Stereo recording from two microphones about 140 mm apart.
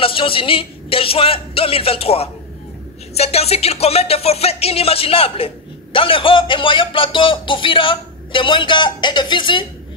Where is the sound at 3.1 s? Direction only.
50° left (ahead or behind).